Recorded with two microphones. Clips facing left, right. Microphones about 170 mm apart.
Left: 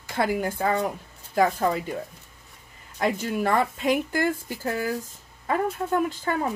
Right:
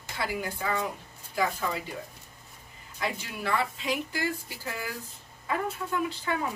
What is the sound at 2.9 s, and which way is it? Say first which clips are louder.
Speech: left 9 dB; 45° left (ahead or behind).